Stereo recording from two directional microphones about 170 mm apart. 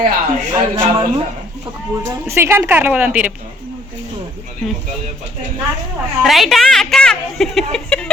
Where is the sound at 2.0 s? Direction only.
15° right (ahead or behind).